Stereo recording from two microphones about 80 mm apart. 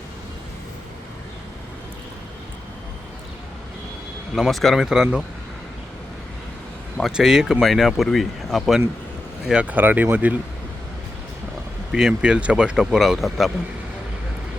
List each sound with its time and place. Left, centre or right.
4.4 s speech: centre
6.9 s speech: centre
9.5 s speech: centre
11.9 s speech: centre